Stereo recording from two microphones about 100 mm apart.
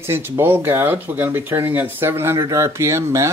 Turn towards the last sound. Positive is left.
turn(degrees=-30)  # may be behind; listen again after turning